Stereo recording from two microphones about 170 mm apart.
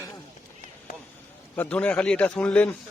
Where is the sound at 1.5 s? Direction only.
10° left (ahead or behind).